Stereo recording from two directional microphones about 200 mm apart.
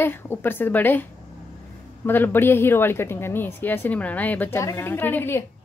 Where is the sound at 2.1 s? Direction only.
10° left (ahead or behind).